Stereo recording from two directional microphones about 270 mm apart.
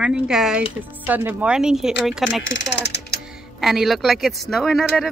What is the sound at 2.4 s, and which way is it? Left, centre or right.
Speech, left.